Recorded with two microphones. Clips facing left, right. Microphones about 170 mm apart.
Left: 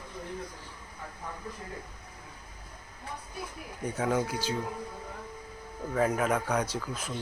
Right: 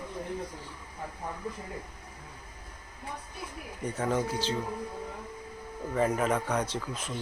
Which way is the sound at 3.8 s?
5° left (ahead or behind).